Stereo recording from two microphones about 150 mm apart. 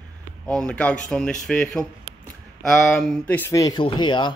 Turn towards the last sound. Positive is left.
turn(degrees=30)  # may be behind; listen again after turning